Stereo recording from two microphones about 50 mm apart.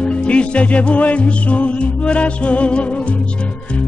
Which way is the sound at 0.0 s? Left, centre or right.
Left.